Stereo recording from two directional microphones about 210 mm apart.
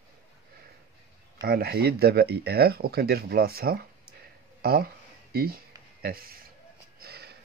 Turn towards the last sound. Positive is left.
turn(degrees=-50)  # may be behind; listen again after turning